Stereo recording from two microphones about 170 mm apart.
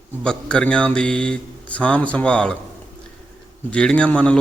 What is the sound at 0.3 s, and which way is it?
Speech, 5° left (ahead or behind).